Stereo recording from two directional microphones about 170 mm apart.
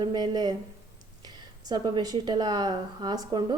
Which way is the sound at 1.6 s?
25° right (ahead or behind).